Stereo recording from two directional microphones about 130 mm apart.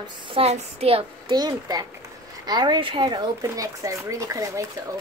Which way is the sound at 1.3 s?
30° right (ahead or behind).